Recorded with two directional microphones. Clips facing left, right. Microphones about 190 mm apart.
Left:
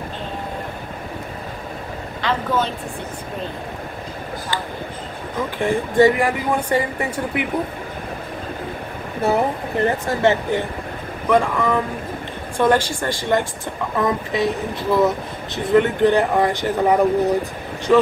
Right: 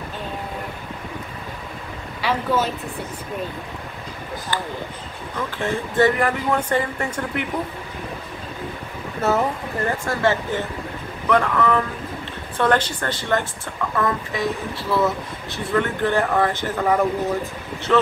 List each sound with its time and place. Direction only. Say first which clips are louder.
2.2 s a woman's voice: even; 5° right (ahead or behind)
5.6 s speech: left 4 dB; 15° left (ahead or behind)
9.2 s speech: left 2 dB; 20° left (ahead or behind)